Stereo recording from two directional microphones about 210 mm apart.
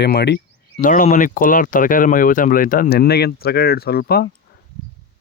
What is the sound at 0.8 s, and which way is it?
Speech, 40° left (ahead or behind).